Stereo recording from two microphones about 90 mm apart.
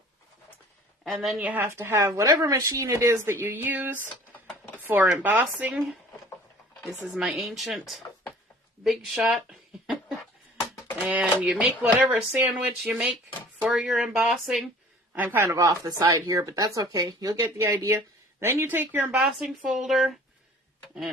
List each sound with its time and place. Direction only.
1.0 s a woman's voice: centre (ahead or behind)
1.4 s speech: 15° right (ahead or behind)
1.6 s speech: 30° right (ahead or behind)
4.8 s a sound: 25° right (ahead or behind)
5.2 s speech: 20° right (ahead or behind)
6.8 s speech: 5° right (ahead or behind)
11.0 s speech: 20° right (ahead or behind)
15.1 s a man's voice: 20° right (ahead or behind)
15.4 s speech: 40° right (ahead or behind); by 19.3 s 20° right (ahead or behind)
19.4 s speech: 5° right (ahead or behind)